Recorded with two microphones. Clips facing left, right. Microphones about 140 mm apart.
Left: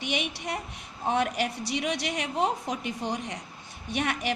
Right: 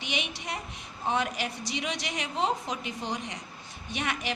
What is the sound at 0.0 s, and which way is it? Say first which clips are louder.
A woman's voice: left 4 dB; 55° left (ahead or behind).